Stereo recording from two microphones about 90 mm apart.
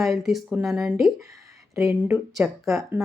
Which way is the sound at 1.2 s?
35° right (ahead or behind).